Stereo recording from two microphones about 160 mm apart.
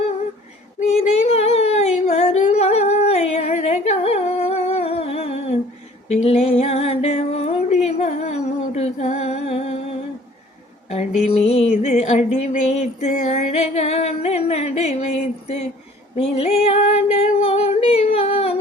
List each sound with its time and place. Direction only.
0.8 s a sound: 45° left (ahead or behind)
10.8 s music: 40° left (ahead or behind)
16.1 s female singing: 40° left (ahead or behind)